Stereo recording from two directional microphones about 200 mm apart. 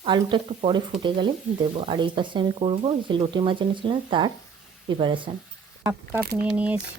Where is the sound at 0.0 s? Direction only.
25° right (ahead or behind).